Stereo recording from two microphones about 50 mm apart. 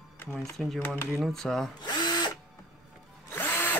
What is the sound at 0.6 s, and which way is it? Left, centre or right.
Speech, centre.